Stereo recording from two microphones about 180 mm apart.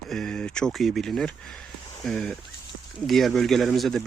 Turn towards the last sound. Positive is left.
turn(degrees=0)  # may be behind; listen again after turning